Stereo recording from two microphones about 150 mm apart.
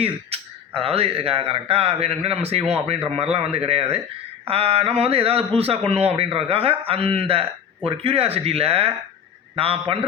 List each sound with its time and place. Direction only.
0.0 s a man's voice: 40° right (ahead or behind)